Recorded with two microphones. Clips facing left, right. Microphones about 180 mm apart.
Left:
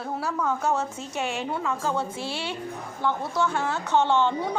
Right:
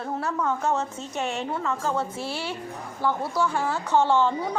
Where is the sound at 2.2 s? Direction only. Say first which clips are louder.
Even; 25° left (ahead or behind).